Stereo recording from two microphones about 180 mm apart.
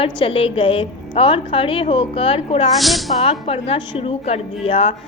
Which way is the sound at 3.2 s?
35° left (ahead or behind).